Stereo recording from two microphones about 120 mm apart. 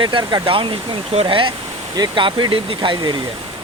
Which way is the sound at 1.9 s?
40° right (ahead or behind).